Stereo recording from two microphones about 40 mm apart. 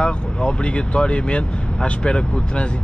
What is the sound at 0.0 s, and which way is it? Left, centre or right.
Speech, left.